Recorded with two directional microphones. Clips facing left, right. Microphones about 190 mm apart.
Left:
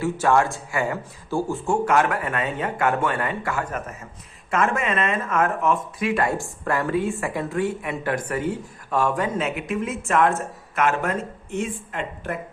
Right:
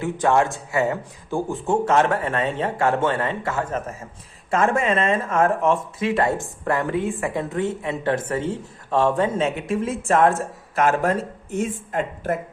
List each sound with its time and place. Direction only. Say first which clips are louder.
0.0 s a man's voice: even; 20° right (ahead or behind); by 12.4 s 40° right (ahead or behind)